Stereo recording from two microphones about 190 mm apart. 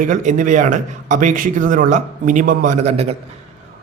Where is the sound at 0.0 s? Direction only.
40° right (ahead or behind).